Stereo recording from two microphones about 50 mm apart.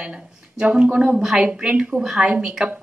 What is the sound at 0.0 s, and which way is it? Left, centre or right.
Speech, centre.